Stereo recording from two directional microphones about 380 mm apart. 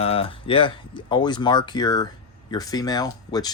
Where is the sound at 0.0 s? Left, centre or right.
Centre.